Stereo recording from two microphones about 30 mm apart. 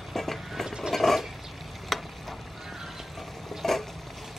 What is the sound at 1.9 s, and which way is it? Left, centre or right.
Frying, centre.